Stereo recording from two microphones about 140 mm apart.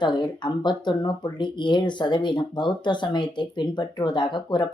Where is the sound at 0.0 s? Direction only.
35° left (ahead or behind).